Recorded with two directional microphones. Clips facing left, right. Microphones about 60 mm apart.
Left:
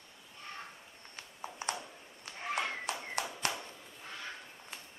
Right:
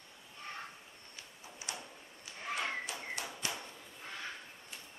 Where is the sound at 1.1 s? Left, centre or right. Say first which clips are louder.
Left 8 dB; left.